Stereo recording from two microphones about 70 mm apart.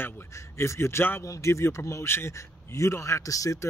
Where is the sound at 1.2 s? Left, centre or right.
Left.